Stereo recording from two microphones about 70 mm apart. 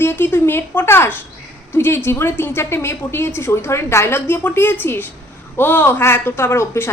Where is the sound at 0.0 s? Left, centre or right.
Left.